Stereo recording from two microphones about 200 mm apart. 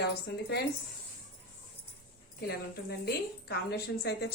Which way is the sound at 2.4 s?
55° left (ahead or behind).